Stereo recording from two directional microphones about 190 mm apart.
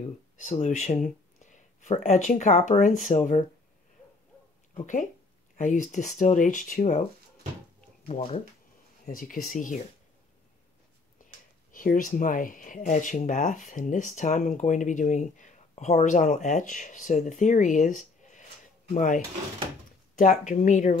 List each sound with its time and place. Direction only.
0.4 s speech: 40° left (ahead or behind)
4.7 s speech: 40° left (ahead or behind)
8.1 s speech: 30° left (ahead or behind)
9.0 s speech: 45° left (ahead or behind)
11.7 s speech: 45° left (ahead or behind)